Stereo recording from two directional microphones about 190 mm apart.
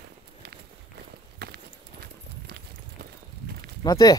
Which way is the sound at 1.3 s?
55° right (ahead or behind).